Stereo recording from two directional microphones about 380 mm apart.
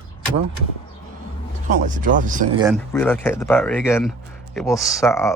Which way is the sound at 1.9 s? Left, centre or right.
Centre.